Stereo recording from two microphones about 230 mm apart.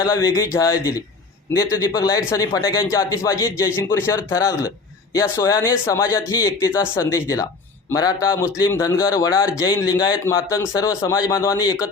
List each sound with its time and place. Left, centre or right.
0.0 s speech: centre